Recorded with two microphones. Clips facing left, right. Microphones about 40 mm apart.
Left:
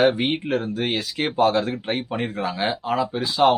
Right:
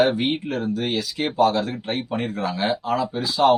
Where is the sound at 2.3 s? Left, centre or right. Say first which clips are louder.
Right 2 dB; centre.